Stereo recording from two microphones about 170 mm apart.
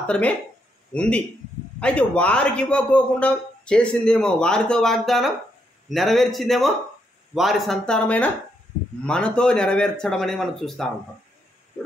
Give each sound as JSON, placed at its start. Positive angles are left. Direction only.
{"t": 0.0, "sound": "a man's voice", "side_deg": 5}